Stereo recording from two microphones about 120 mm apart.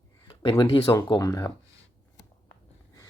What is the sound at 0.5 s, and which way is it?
Speech, 30° left (ahead or behind).